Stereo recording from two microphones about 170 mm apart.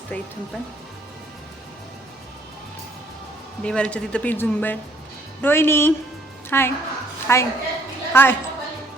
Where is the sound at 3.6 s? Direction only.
5° left (ahead or behind).